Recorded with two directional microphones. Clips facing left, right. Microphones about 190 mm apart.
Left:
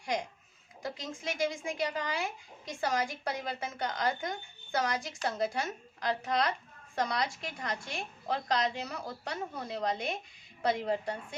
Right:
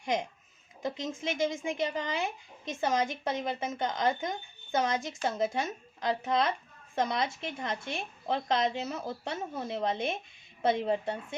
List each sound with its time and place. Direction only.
0.0 s a child's voice: 20° right (ahead or behind)